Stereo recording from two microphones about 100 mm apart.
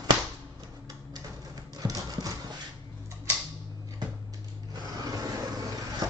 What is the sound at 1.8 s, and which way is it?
Clip-clop, 40° right (ahead or behind).